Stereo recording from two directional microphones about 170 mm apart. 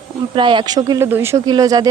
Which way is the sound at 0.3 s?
30° right (ahead or behind).